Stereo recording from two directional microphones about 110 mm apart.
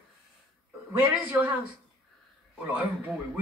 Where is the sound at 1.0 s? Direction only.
15° right (ahead or behind).